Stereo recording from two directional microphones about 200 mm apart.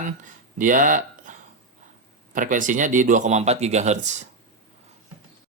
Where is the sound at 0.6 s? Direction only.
40° right (ahead or behind).